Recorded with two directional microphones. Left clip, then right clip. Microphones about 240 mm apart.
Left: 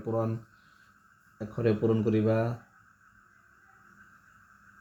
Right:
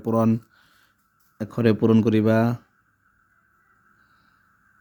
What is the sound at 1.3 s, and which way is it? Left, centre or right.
Speech, right.